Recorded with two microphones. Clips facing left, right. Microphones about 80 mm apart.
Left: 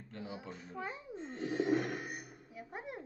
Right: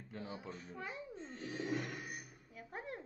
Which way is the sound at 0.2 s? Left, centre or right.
Centre.